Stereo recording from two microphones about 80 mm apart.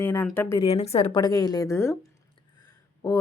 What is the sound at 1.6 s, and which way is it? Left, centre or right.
Speech, left.